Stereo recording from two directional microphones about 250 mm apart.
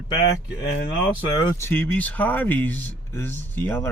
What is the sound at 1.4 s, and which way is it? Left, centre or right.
Speech, centre.